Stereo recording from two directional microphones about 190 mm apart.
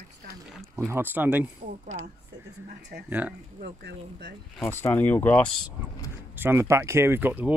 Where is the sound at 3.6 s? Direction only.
60° right (ahead or behind).